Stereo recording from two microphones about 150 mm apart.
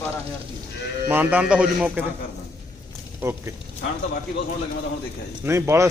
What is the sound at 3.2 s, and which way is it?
Speech, 20° right (ahead or behind).